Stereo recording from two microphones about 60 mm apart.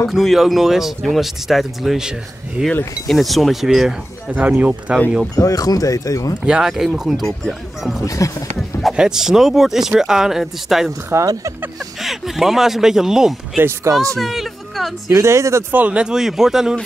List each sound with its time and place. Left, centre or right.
0.1 s speech: centre
3.1 s speech: centre
4.3 s speech: right
5.3 s speech: left
6.4 s speech: centre
8.0 s speech: left
8.9 s speech: centre
11.1 s speech: right
11.8 s speech: centre
13.9 s speech: right
14.2 s a sound: centre
15.0 s speech: right
15.7 s speech: right